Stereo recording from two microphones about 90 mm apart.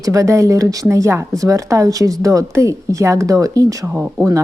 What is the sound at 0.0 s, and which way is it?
A woman's voice, 35° right (ahead or behind).